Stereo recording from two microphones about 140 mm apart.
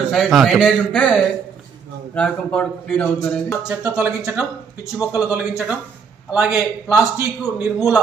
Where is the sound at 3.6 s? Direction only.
10° right (ahead or behind).